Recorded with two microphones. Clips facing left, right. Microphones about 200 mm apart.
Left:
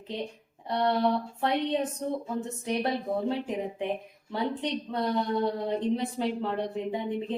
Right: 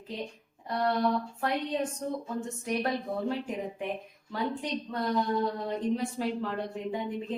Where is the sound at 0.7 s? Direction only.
30° left (ahead or behind).